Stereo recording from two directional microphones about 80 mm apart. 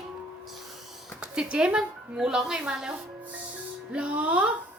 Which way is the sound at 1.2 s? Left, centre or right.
Centre.